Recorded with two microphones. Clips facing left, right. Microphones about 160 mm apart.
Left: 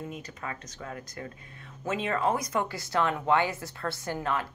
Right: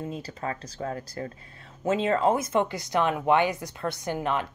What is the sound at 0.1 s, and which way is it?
Speech, 30° right (ahead or behind).